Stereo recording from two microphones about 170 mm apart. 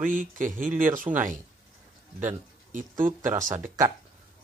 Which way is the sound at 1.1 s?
25° right (ahead or behind).